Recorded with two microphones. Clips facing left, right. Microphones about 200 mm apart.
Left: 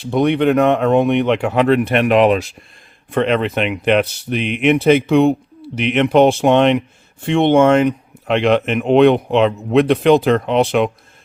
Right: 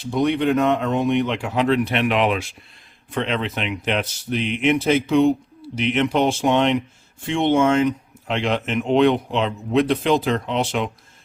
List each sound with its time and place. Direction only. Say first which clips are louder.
0.1 s speech: left 5 dB; 65° left (ahead or behind); by 2.6 s 40° left (ahead or behind)
3.1 s speech: left 7 dB; 55° left (ahead or behind)